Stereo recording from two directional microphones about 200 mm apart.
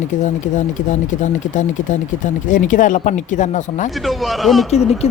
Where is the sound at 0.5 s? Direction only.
40° left (ahead or behind).